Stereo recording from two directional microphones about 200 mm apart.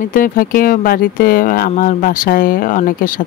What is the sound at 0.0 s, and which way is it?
Speech, 45° left (ahead or behind).